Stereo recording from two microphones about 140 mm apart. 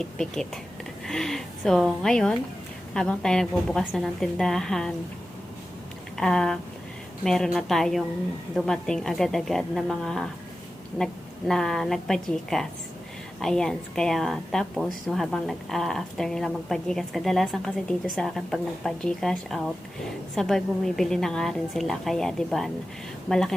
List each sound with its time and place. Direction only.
0.0 s a woman's voice: 5° left (ahead or behind)
6.1 s a woman's voice: 5° left (ahead or behind)